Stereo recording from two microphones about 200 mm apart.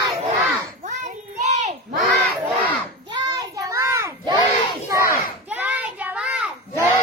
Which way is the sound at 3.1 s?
20° right (ahead or behind).